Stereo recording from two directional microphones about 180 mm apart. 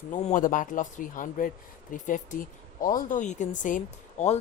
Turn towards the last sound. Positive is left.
turn(degrees=45)  # may be behind; listen again after turning